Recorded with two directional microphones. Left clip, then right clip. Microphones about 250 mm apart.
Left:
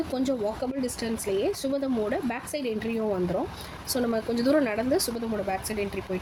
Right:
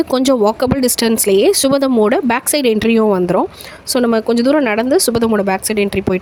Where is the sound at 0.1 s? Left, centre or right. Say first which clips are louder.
Right 15 dB; right.